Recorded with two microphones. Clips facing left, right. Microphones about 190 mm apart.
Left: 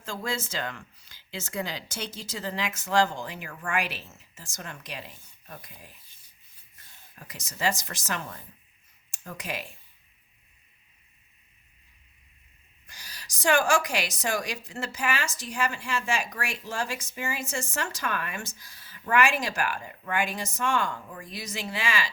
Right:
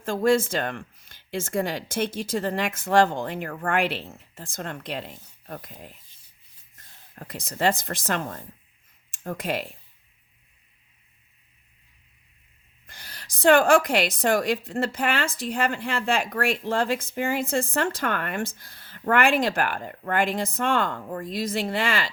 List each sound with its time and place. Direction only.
0.0 s a woman's voice: 55° right (ahead or behind)
6.7 s speech: 55° right (ahead or behind)
12.9 s a woman's voice: 55° right (ahead or behind)